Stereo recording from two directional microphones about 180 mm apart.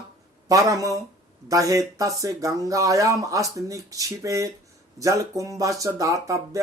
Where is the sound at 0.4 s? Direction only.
20° right (ahead or behind).